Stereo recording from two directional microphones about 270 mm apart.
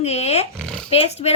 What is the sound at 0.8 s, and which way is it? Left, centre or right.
Speech, left.